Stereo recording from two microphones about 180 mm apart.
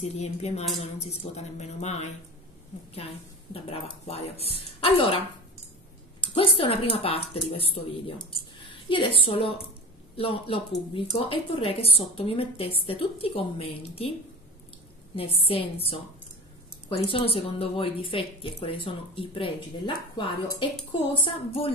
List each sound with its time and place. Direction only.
0.0 s a woman's voice: 35° left (ahead or behind)
3.5 s a woman's voice: 30° left (ahead or behind)
6.2 s a woman's voice: 30° left (ahead or behind)
15.1 s a woman's voice: 30° left (ahead or behind)